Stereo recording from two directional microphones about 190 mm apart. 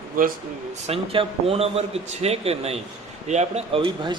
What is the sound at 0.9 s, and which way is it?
A man's voice, 30° right (ahead or behind).